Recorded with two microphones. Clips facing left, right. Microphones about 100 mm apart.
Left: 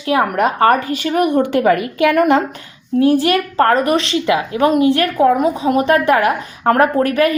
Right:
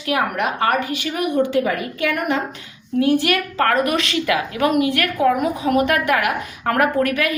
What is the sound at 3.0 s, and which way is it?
A woman's voice, 30° left (ahead or behind).